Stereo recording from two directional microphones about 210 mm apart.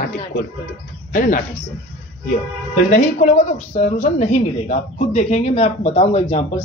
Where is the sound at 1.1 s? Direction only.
40° left (ahead or behind).